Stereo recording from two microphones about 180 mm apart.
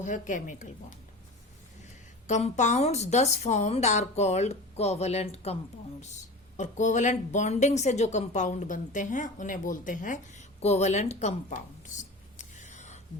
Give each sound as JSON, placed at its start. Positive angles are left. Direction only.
{"t": 0.0, "sound": "a woman's voice", "side_deg": 45}
{"t": 2.2, "sound": "a woman's voice", "side_deg": 40}
{"t": 6.6, "sound": "a woman's voice", "side_deg": 45}
{"t": 12.4, "sound": "a sound", "side_deg": 40}